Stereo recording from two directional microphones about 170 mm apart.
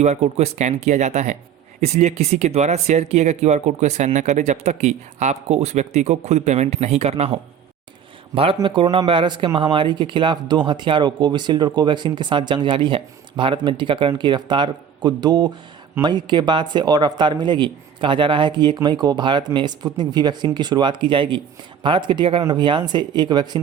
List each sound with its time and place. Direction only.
0.0 s speech: 40° right (ahead or behind)
8.5 s speech: 30° right (ahead or behind)